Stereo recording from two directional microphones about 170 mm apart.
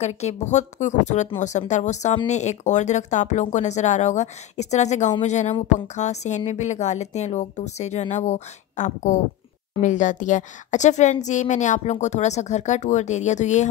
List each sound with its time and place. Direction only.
0.0 s a woman's voice: 40° left (ahead or behind)